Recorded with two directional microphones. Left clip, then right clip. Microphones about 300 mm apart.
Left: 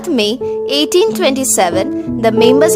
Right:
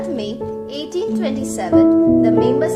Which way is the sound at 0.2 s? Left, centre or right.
Left.